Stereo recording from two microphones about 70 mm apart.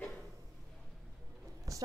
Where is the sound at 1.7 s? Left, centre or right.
Right.